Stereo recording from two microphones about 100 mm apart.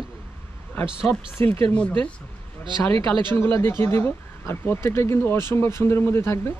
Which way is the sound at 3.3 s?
25° left (ahead or behind).